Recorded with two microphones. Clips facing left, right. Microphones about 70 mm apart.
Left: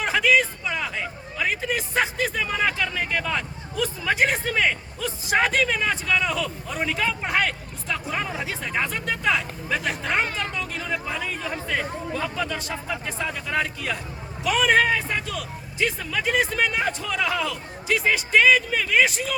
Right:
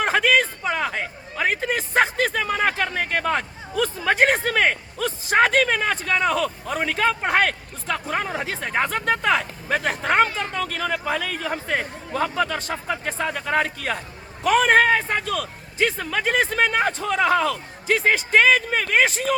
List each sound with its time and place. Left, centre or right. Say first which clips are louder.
0.0 s speech: right 1 dB; right
11.4 s speech: right 2 dB; right